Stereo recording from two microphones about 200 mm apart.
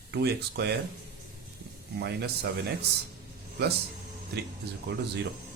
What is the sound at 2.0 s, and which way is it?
Speech, 55° right (ahead or behind).